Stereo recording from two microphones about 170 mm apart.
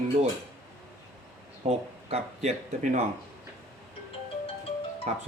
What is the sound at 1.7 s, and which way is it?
Speech, 40° right (ahead or behind).